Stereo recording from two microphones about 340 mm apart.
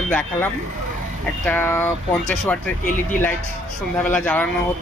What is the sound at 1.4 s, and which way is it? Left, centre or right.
Speech, centre.